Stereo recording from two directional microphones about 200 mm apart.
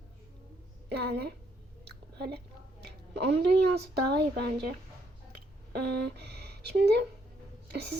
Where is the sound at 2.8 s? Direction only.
60° right (ahead or behind).